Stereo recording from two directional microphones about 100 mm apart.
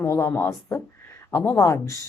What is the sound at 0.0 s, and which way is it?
Speech, 30° left (ahead or behind).